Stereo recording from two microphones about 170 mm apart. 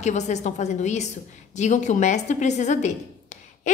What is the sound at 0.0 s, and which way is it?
A woman's voice, 45° left (ahead or behind).